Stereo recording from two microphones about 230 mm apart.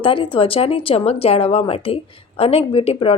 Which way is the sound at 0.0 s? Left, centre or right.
Left.